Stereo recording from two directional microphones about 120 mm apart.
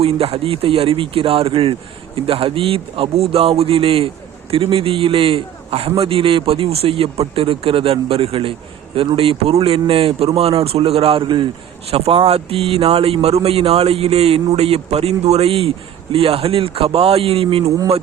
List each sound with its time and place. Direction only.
0.0 s a man's voice: 55° right (ahead or behind)
11.9 s a man's voice: 55° right (ahead or behind)